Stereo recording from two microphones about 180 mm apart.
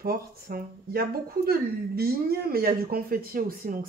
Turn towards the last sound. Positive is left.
turn(degrees=-55)  # may be behind; listen again after turning